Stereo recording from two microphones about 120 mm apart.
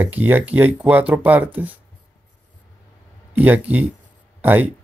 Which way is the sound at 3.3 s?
15° right (ahead or behind).